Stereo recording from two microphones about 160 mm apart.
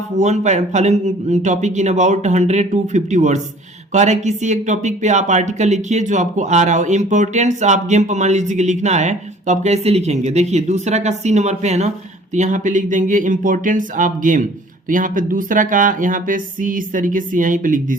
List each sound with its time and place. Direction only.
0.2 s speech: 45° right (ahead or behind)